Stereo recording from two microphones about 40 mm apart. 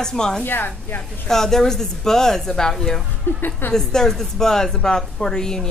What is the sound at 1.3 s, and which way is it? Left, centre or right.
A woman's voice, centre.